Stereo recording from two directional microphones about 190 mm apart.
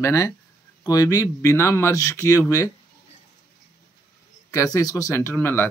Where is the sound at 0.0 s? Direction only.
15° left (ahead or behind).